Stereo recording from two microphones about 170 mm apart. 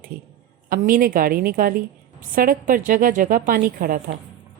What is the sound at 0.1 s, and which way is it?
A woman's voice, 60° right (ahead or behind).